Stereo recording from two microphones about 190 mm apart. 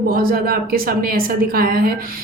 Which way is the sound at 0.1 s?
50° right (ahead or behind).